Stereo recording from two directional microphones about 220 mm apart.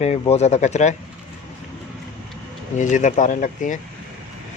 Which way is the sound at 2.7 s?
35° left (ahead or behind).